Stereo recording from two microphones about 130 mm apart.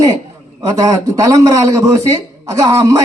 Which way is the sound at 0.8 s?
25° right (ahead or behind).